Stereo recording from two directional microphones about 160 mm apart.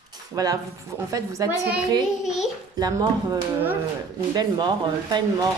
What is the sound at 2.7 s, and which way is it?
Speech, 25° right (ahead or behind).